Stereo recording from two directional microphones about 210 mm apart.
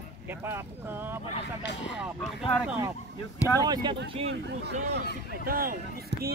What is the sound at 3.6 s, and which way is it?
Speech, 20° right (ahead or behind).